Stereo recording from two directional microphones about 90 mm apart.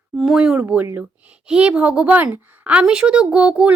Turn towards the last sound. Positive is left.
turn(degrees=-15)  # may be behind; listen again after turning